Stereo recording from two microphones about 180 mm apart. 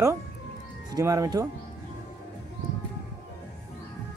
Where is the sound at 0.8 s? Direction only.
20° right (ahead or behind).